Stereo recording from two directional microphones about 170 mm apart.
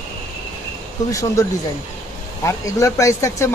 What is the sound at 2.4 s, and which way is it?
Speech, 15° left (ahead or behind).